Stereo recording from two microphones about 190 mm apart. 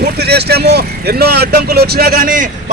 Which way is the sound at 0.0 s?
60° right (ahead or behind).